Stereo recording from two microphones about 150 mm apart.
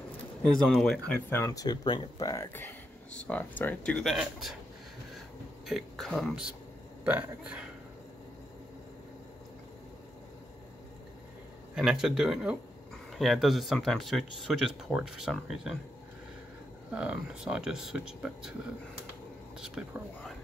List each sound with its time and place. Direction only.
0.7 s speech: centre (ahead or behind)
5.7 s speech: centre (ahead or behind)
11.7 s speech: 5° right (ahead or behind)
16.9 s speech: 10° right (ahead or behind)